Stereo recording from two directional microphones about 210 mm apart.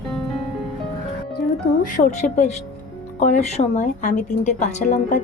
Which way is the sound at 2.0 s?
35° left (ahead or behind).